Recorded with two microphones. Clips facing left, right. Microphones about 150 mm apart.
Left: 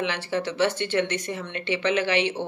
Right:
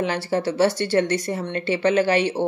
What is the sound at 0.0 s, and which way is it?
Speech, 40° right (ahead or behind).